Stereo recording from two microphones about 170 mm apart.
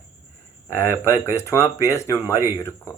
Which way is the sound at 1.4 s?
15° left (ahead or behind).